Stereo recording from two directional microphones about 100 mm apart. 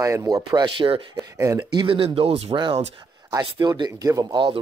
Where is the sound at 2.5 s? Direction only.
50° right (ahead or behind).